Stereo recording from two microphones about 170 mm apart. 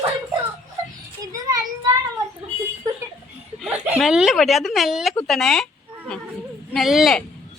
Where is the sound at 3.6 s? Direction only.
Centre (ahead or behind).